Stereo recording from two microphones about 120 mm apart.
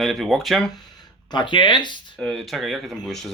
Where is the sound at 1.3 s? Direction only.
40° left (ahead or behind).